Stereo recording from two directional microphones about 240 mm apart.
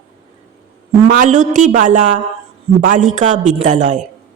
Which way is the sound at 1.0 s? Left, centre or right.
Right.